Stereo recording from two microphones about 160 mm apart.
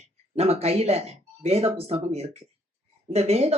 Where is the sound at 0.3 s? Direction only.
40° right (ahead or behind).